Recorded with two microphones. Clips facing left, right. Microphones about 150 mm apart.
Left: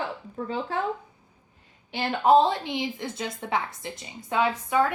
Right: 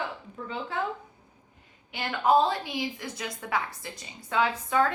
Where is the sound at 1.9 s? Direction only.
30° left (ahead or behind).